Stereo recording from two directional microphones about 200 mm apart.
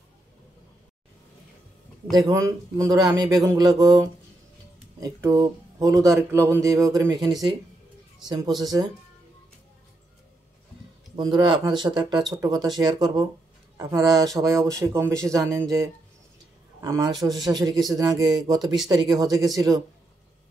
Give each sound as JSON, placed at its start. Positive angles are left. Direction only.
{"t": 2.1, "sound": "speech", "side_deg": -15}
{"t": 11.1, "sound": "speech", "side_deg": -25}
{"t": 17.2, "sound": "speech", "side_deg": 0}
{"t": 17.5, "sound": "speech", "side_deg": -20}